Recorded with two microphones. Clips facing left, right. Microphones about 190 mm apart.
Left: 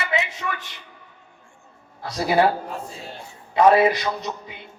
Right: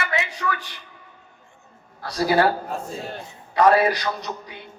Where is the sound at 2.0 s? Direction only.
20° left (ahead or behind).